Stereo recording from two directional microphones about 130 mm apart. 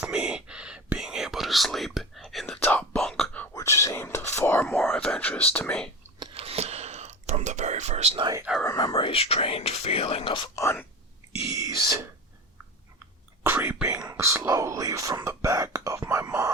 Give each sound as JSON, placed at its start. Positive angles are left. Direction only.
{"t": 0.0, "sound": "whispering", "side_deg": -10}
{"t": 3.5, "sound": "whispering", "side_deg": 25}
{"t": 5.5, "sound": "speech", "side_deg": 10}
{"t": 6.3, "sound": "whispering", "side_deg": -50}
{"t": 8.6, "sound": "whispering", "side_deg": 25}
{"t": 8.9, "sound": "whispering", "side_deg": 45}
{"t": 10.5, "sound": "whispering", "side_deg": 20}
{"t": 11.4, "sound": "whispering", "side_deg": -25}
{"t": 13.4, "sound": "whispering", "side_deg": -15}